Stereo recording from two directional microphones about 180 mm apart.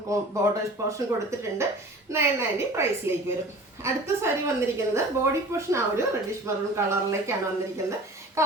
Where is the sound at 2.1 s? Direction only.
15° right (ahead or behind).